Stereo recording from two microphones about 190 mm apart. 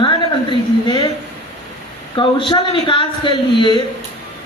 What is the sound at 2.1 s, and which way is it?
Speech, 25° left (ahead or behind).